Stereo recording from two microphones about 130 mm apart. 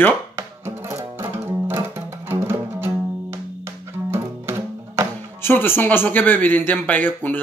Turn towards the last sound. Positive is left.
turn(degrees=15)  # may be behind; listen again after turning